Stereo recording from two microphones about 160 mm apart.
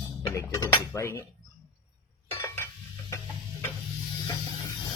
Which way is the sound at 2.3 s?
15° left (ahead or behind).